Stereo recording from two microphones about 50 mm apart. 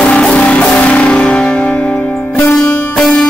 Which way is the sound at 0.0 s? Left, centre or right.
Centre.